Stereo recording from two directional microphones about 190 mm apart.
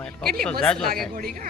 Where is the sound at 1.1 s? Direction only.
45° right (ahead or behind).